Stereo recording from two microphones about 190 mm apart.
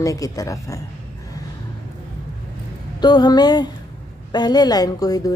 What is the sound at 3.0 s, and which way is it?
A woman's voice, 20° left (ahead or behind).